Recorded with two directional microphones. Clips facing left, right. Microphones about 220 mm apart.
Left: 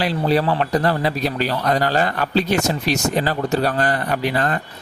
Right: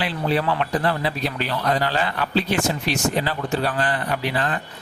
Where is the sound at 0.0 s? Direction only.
40° left (ahead or behind).